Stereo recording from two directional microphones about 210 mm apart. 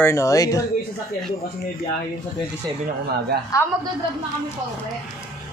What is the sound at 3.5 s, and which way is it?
Speech, 15° left (ahead or behind).